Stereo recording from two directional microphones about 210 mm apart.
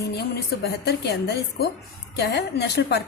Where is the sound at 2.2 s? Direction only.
55° left (ahead or behind).